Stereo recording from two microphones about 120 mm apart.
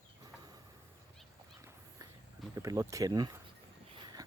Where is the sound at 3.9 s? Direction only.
40° right (ahead or behind).